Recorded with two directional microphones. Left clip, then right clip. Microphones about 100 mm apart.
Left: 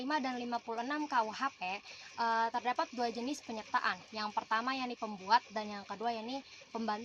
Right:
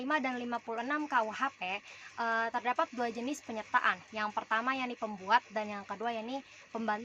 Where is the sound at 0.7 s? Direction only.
30° right (ahead or behind).